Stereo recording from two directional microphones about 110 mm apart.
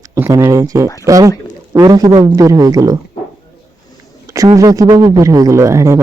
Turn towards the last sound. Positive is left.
turn(degrees=-30)  # may be behind; listen again after turning